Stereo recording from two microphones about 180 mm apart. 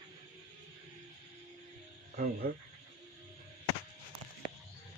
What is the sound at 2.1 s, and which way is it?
Speech, 50° right (ahead or behind).